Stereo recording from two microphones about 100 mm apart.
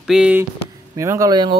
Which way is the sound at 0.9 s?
30° right (ahead or behind).